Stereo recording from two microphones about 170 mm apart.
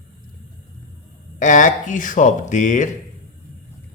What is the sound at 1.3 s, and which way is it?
Speech, 50° left (ahead or behind).